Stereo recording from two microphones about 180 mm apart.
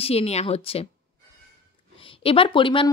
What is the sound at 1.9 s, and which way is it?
Speech, 30° left (ahead or behind).